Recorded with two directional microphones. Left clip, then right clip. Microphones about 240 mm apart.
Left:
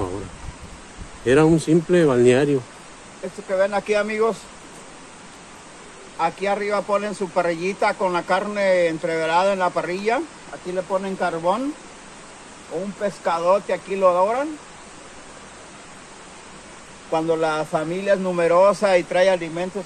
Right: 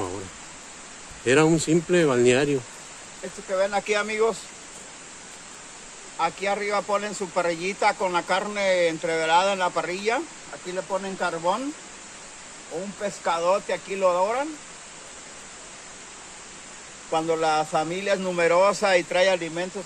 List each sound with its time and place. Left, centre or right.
1.2 s speech: centre
3.5 s speech: centre
6.1 s speech: centre
13.0 s speech: centre
17.1 s speech: centre